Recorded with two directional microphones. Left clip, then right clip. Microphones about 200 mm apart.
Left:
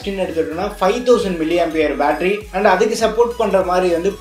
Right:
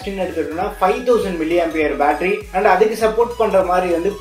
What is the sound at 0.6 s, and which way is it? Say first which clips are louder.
Speech: right 2 dB; 45° left (ahead or behind).